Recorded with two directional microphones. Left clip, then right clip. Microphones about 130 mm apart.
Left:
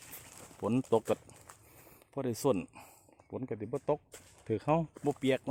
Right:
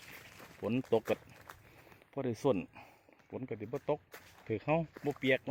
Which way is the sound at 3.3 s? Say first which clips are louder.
Left 3 dB; 35° left (ahead or behind).